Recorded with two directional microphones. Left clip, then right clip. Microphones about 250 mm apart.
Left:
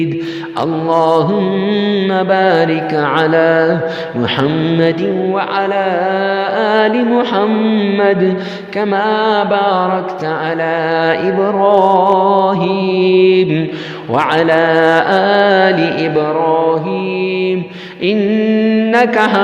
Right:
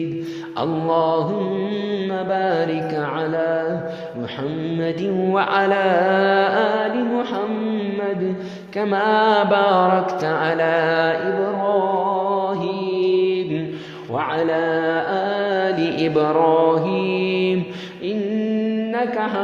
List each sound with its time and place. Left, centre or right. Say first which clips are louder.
0.9 s mantra: left 7 dB; left
5.3 s mantra: right 1 dB; centre
6.7 s mantra: left 8 dB; left
8.8 s mantra: left 4 dB; left
10.6 s music: left 4 dB; centre
11.6 s mantra: left 11 dB; left
16.1 s mantra: left 1 dB; centre
18.0 s mantra: left 10 dB; left